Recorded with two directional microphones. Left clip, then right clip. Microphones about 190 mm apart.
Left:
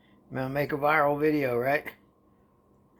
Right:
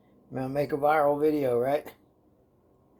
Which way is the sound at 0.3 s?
25° left (ahead or behind).